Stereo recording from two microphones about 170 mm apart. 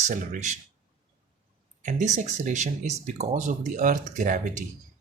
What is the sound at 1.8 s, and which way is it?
Speech, 45° right (ahead or behind).